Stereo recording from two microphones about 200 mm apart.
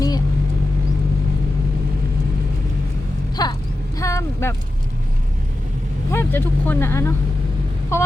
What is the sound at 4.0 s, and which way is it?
Speech, 15° left (ahead or behind).